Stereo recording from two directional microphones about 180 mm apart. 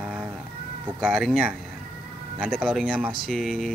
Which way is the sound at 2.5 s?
Centre (ahead or behind).